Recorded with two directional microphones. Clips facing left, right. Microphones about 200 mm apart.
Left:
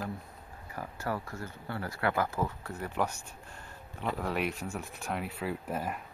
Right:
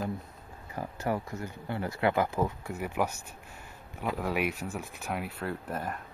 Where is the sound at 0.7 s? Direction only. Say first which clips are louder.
Right 4 dB; 20° right (ahead or behind); by 5.9 s 5° left (ahead or behind).